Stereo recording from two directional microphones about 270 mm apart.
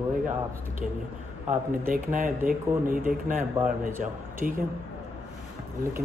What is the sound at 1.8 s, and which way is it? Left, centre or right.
A man's voice, right.